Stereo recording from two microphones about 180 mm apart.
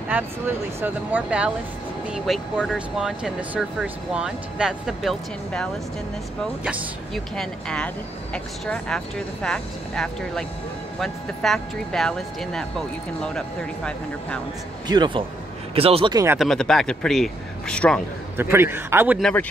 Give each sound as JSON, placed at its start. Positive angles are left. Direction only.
{"t": 0.1, "sound": "speech", "side_deg": -10}
{"t": 7.3, "sound": "speech", "side_deg": 5}
{"t": 14.9, "sound": "speech", "side_deg": -25}
{"t": 16.3, "sound": "speech", "side_deg": 5}
{"t": 18.4, "sound": "speech", "side_deg": -15}
{"t": 19.1, "sound": "speech", "side_deg": 5}